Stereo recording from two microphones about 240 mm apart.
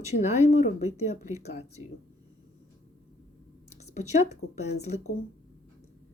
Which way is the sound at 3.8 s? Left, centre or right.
Left.